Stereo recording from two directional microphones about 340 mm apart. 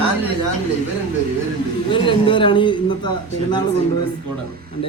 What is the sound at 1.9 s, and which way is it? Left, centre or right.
Speech, centre.